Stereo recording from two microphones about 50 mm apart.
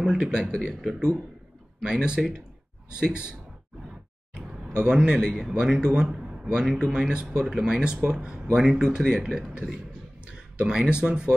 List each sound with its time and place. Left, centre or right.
0.2 s speech: centre
0.5 s speech: centre
0.7 s a man's voice: centre
1.8 s a man's voice: centre
4.8 s a man's voice: centre
6.1 s a sound: centre
6.5 s a man's voice: centre